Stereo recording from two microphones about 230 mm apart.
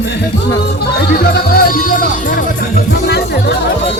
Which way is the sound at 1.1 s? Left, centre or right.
Left.